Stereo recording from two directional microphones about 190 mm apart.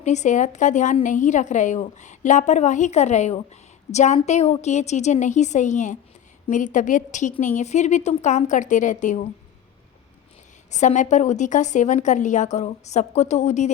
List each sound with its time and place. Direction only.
0.0 s a woman's voice: 40° left (ahead or behind)
10.7 s a woman's voice: 40° left (ahead or behind)